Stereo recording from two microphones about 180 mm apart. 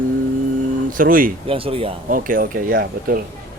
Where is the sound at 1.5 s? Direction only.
30° right (ahead or behind).